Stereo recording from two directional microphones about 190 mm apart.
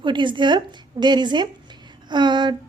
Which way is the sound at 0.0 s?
25° right (ahead or behind).